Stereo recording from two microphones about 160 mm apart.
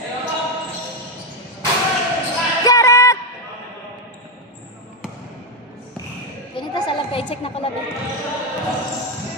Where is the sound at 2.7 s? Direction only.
20° left (ahead or behind).